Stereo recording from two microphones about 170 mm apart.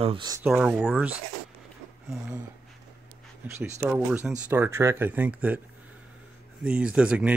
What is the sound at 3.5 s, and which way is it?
Speech, 10° right (ahead or behind).